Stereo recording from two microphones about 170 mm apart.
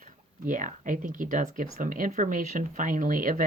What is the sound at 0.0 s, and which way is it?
Speech, 50° right (ahead or behind).